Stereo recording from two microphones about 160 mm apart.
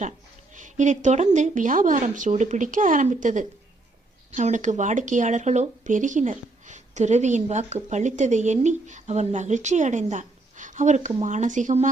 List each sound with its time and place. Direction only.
0.5 s speech: 50° right (ahead or behind)